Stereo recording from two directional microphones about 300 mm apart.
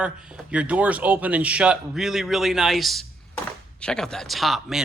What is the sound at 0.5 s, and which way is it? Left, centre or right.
A man's voice, centre.